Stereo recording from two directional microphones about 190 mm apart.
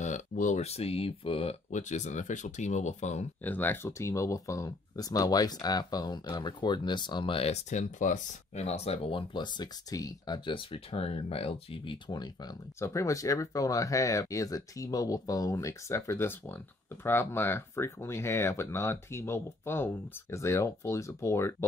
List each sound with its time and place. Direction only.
0.0 s speech: 40° left (ahead or behind)
3.4 s speech: 10° left (ahead or behind)